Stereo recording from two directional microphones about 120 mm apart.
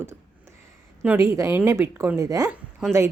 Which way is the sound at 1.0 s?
25° right (ahead or behind).